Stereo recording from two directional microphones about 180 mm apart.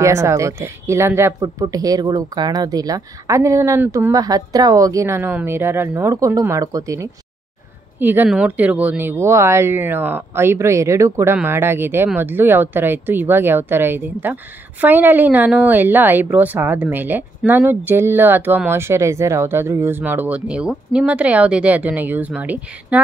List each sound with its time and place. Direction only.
0.0 s speech: 15° right (ahead or behind)